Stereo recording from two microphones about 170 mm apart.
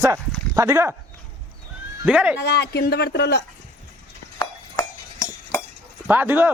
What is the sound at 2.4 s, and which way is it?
Speech, 75° left (ahead or behind).